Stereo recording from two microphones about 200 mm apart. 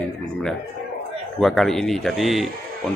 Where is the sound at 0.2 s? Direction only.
5° left (ahead or behind).